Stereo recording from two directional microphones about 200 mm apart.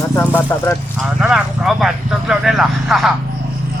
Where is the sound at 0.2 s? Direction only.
10° left (ahead or behind).